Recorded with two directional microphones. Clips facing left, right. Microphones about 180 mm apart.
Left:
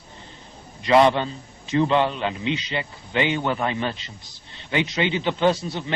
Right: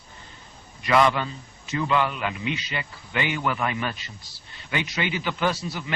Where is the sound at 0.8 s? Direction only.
25° left (ahead or behind).